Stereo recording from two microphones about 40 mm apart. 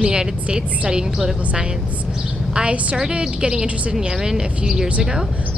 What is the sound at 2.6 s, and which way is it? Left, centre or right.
A woman's voice, right.